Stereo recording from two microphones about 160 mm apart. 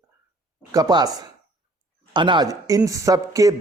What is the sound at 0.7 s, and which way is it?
Speech, 25° right (ahead or behind).